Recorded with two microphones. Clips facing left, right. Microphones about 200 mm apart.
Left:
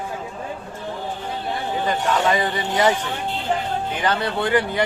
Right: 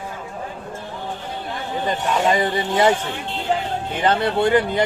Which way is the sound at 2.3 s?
25° right (ahead or behind).